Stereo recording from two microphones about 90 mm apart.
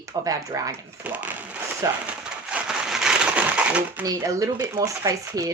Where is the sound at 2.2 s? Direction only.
10° right (ahead or behind).